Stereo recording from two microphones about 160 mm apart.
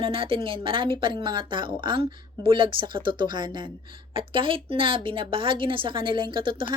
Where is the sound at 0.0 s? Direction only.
35° right (ahead or behind).